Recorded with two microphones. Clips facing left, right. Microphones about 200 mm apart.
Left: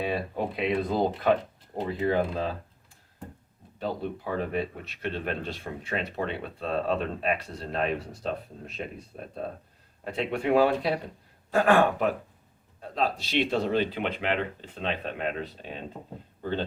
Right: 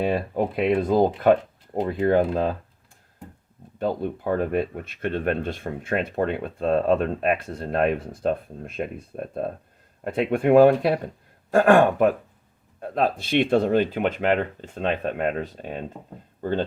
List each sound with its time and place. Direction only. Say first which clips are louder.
0.0 s speech: right 6 dB; 45° right (ahead or behind)
3.8 s speech: right 6 dB; 50° right (ahead or behind)